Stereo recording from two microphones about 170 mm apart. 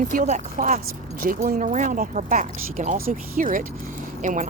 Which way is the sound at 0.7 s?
55° right (ahead or behind).